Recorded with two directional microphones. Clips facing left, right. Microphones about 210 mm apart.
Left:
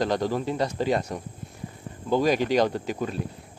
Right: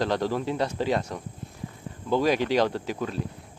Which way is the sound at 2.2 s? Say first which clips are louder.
Left 1 dB; 45° left (ahead or behind).